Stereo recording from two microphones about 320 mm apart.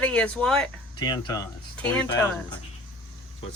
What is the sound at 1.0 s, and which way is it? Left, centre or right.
Speech, centre.